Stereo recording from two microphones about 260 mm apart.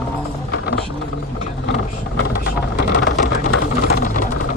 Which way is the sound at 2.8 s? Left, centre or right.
Left.